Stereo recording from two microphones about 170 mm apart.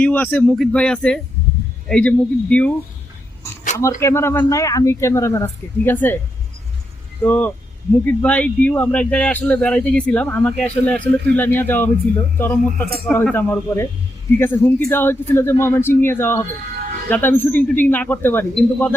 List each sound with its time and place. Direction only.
0.0 s speech: 10° left (ahead or behind)
4.0 s speech: 15° left (ahead or behind)
7.2 s speech: 10° left (ahead or behind)